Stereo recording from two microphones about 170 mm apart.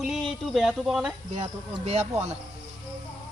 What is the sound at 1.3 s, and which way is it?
Speech, 40° right (ahead or behind).